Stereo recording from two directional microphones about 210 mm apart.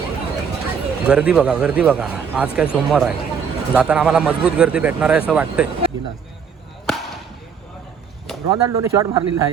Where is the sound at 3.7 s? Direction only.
5° right (ahead or behind).